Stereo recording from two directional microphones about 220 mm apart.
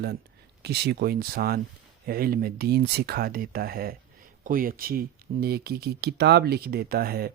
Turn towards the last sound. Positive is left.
turn(degrees=-45)  # may be behind; listen again after turning